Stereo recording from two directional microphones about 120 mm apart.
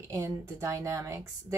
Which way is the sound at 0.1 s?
25° right (ahead or behind).